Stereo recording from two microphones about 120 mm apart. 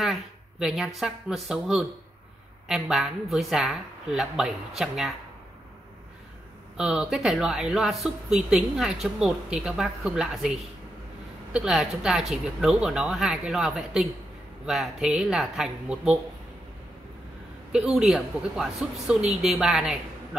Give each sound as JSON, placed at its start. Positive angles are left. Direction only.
{"t": 0.0, "sound": "speech", "side_deg": -5}
{"t": 6.8, "sound": "speech", "side_deg": -5}
{"t": 17.7, "sound": "speech", "side_deg": -5}